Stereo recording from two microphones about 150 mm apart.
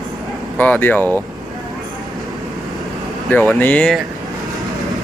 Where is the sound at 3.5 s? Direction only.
10° left (ahead or behind).